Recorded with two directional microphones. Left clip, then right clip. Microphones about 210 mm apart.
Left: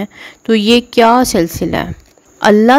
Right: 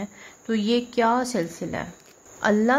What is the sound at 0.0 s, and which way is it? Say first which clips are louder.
A woman's voice: left 13 dB; 40° left (ahead or behind).